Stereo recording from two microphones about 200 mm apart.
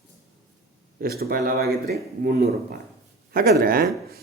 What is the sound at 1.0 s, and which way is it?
Speech, 50° right (ahead or behind).